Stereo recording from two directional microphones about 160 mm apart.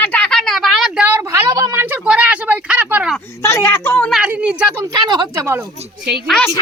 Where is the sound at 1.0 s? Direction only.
15° right (ahead or behind).